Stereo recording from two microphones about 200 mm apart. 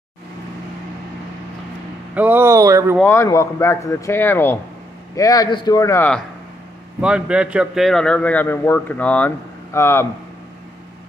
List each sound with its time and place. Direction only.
2.1 s speech: 10° right (ahead or behind)
3.0 s a man's voice: 10° left (ahead or behind)
7.0 s a man's voice: 5° right (ahead or behind); by 10.0 s 10° left (ahead or behind)